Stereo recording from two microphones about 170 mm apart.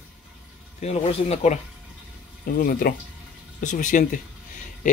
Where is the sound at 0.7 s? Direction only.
40° left (ahead or behind).